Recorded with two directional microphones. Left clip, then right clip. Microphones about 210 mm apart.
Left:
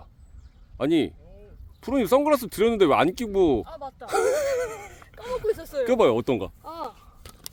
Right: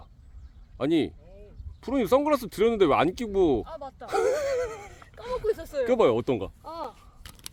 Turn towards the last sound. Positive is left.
turn(degrees=20)  # may be behind; listen again after turning